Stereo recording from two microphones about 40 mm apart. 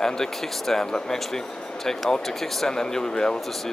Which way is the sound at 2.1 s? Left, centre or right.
Centre.